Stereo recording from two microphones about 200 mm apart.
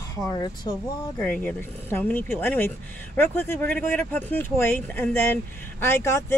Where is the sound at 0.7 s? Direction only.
25° left (ahead or behind).